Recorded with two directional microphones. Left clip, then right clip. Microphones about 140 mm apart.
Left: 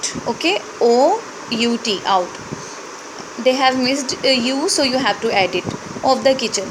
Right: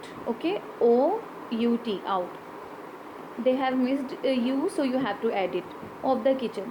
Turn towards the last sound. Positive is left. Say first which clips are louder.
# left 9 dB
turn(degrees=20)  # may be behind; listen again after turning